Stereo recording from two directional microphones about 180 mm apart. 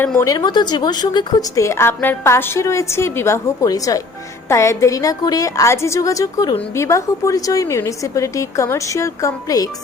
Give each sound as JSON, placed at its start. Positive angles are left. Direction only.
{"t": 0.0, "sound": "a woman's voice", "side_deg": 10}